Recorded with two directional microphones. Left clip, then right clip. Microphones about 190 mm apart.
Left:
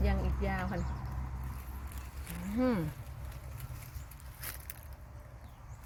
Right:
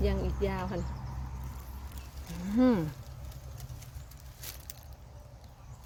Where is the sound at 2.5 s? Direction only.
65° right (ahead or behind).